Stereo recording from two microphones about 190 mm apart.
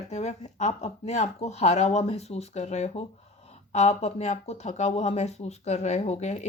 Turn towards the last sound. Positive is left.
turn(degrees=35)  # may be behind; listen again after turning